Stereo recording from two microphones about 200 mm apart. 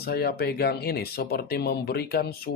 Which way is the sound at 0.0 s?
50° left (ahead or behind).